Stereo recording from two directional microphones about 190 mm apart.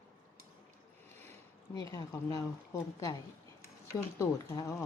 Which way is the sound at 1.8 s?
15° left (ahead or behind).